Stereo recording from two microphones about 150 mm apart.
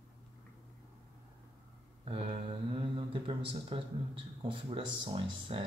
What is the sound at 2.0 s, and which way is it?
Mantra, 40° right (ahead or behind).